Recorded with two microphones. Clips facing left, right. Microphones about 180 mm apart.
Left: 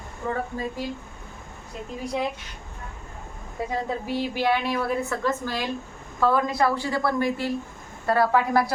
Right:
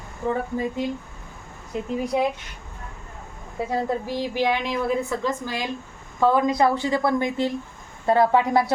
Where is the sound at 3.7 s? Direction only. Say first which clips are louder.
Right 3 dB; 10° right (ahead or behind).